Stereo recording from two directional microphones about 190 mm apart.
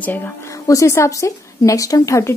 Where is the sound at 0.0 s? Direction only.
10° left (ahead or behind).